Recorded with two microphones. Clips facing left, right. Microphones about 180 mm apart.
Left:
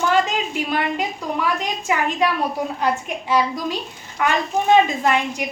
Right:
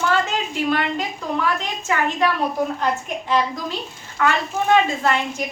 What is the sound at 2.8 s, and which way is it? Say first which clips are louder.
A woman's voice: left 1 dB; 10° left (ahead or behind).